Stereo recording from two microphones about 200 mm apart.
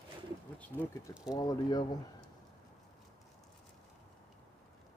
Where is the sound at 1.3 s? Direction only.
20° left (ahead or behind).